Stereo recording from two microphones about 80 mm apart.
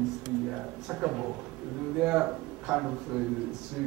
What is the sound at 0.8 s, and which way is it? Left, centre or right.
Speech, centre.